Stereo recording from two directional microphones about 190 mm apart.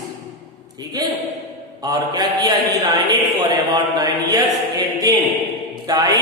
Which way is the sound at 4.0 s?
20° right (ahead or behind).